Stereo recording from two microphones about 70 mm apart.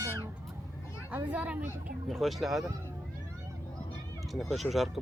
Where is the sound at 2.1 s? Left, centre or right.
Centre.